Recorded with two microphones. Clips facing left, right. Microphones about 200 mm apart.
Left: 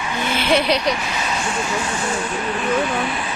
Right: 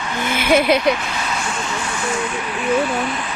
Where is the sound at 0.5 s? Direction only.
50° right (ahead or behind).